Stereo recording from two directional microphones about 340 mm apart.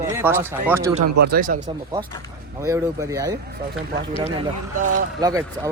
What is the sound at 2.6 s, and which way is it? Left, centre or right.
Speech, centre.